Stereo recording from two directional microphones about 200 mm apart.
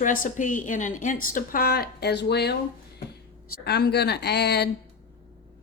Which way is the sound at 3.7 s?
55° left (ahead or behind).